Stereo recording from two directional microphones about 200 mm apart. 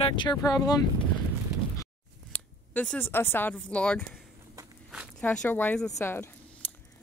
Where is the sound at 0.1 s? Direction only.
20° left (ahead or behind).